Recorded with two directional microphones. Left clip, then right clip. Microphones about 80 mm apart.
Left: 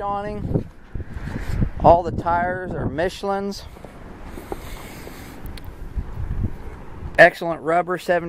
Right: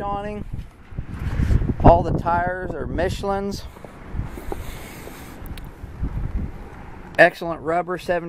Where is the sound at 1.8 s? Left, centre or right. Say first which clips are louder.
Left 1 dB; centre.